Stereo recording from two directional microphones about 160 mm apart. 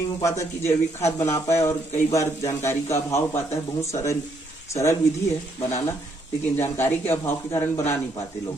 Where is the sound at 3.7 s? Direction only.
20° left (ahead or behind).